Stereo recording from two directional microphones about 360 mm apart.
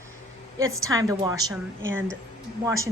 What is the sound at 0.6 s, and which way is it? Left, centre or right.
Speech, right.